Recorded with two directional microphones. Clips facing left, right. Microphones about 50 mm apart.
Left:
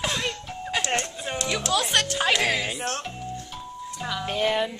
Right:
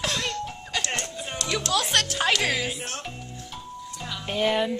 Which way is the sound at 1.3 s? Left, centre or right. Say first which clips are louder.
Left 1 dB; centre.